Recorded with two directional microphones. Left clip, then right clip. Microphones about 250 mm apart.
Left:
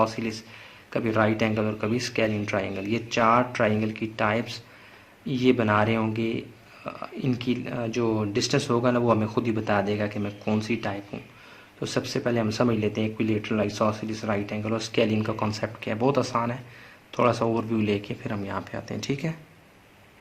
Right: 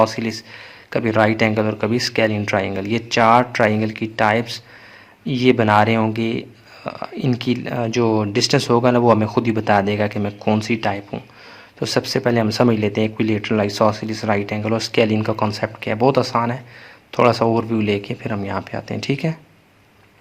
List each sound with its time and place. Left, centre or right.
0.0 s speech: right